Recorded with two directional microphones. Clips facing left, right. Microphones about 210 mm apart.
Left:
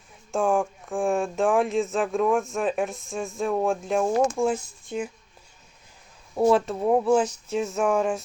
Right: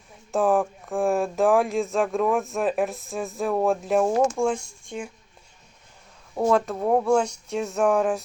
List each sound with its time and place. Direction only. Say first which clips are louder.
0.3 s speech: right 2 dB; centre (ahead or behind)
6.5 s speech: right 1 dB; 5° left (ahead or behind)